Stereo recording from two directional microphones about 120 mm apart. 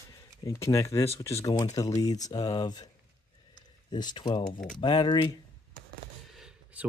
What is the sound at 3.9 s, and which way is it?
Speech, 35° left (ahead or behind).